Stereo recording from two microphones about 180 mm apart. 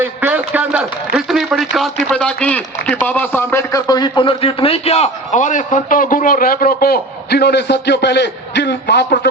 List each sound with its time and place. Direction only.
0.0 s a man's voice: 10° right (ahead or behind); by 9.3 s 65° left (ahead or behind)